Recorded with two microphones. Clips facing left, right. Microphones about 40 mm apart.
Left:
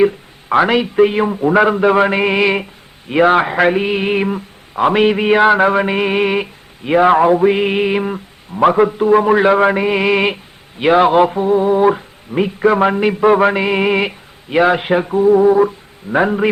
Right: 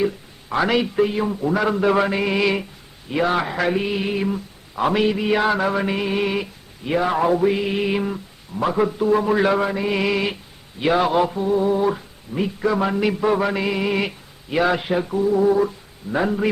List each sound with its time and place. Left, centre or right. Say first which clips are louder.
0.0 s a sound: left 9 dB; left
1.0 s speech: left 7 dB; left
4.7 s a man's voice: left 6 dB; left
5.0 s speech: left 8 dB; left
13.3 s speech: left 8 dB; left